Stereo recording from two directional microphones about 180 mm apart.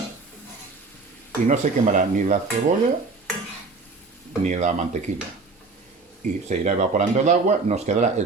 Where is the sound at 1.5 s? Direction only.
45° right (ahead or behind).